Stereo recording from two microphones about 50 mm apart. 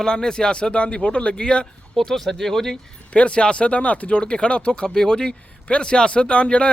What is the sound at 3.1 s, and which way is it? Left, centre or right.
Speech, left.